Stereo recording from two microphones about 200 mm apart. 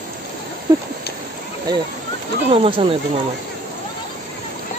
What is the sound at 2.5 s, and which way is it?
Speech, 30° right (ahead or behind).